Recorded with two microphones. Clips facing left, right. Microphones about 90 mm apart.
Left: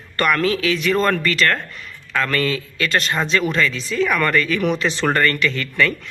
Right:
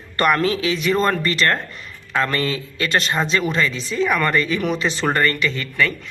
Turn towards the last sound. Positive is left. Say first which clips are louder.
# left 1 dB
turn(degrees=-10)  # may be behind; listen again after turning